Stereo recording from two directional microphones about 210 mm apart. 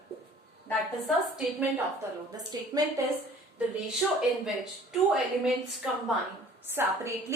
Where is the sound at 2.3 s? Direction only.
15° right (ahead or behind).